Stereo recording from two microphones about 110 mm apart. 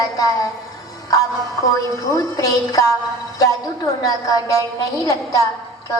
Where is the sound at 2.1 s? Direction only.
30° left (ahead or behind).